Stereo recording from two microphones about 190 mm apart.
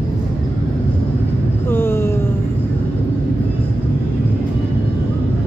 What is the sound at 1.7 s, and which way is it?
Vehicle, 10° left (ahead or behind).